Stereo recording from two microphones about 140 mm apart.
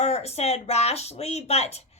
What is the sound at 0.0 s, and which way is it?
A child's voice, 50° left (ahead or behind).